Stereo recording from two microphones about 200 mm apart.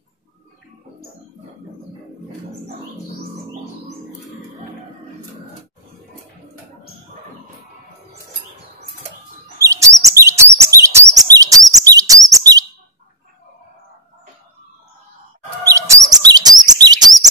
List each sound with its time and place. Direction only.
9.6 s chirp: 15° right (ahead or behind)
15.7 s chirp: 15° right (ahead or behind)